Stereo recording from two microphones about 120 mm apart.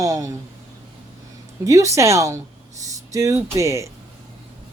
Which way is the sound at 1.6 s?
25° right (ahead or behind).